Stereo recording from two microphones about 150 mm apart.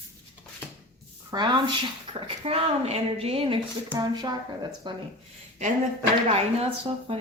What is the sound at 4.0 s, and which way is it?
Speech, 25° right (ahead or behind).